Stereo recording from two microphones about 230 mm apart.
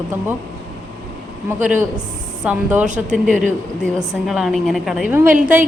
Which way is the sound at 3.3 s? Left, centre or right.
Right.